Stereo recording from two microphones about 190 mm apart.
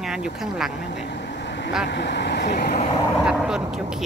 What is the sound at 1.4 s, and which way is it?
Vehicle, 60° left (ahead or behind).